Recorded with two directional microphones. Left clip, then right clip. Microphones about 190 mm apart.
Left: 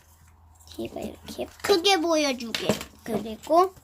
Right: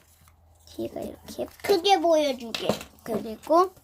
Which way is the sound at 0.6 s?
25° right (ahead or behind).